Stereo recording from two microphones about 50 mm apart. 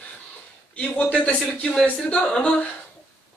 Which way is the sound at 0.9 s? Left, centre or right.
Left.